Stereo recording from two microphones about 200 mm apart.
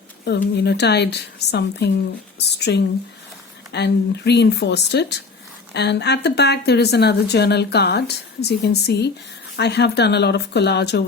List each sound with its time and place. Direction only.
0.3 s speech: 60° left (ahead or behind)